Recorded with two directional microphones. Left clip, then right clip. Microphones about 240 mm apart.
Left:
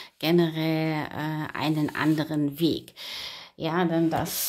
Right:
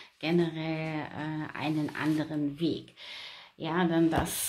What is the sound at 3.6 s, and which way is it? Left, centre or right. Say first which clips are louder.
Speech: left 2 dB; left.